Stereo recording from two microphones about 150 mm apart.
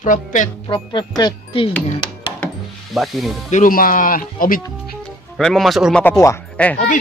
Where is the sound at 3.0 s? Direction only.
Centre (ahead or behind).